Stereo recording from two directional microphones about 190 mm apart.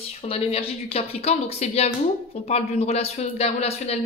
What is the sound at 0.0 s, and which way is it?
Speech, 30° left (ahead or behind).